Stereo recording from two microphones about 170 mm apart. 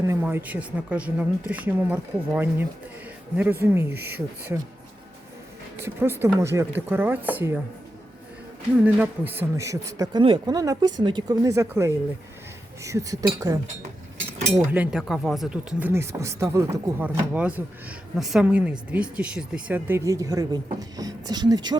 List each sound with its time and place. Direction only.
0.0 s a woman's voice: 15° right (ahead or behind)
5.8 s a woman's voice: 15° right (ahead or behind)
8.8 s speech: 10° right (ahead or behind)
14.7 s speech: 5° right (ahead or behind)
15.9 s a woman's voice: 15° right (ahead or behind)